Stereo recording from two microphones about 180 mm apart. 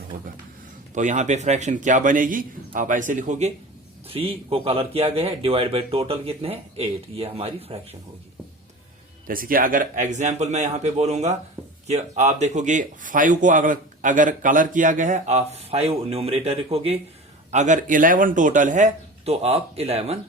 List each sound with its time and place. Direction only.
0.9 s speech: 45° right (ahead or behind)
9.2 s speech: 50° right (ahead or behind); by 20.1 s 35° right (ahead or behind)